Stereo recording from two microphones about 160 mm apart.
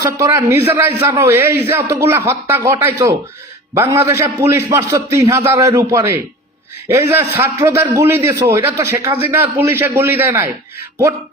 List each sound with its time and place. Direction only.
0.0 s a man's voice: 20° right (ahead or behind)